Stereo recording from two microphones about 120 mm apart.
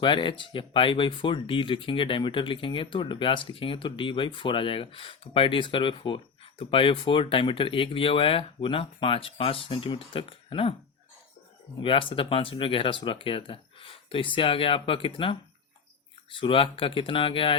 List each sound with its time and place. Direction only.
0.0 s speech: 45° left (ahead or behind)
11.8 s speech: 45° left (ahead or behind)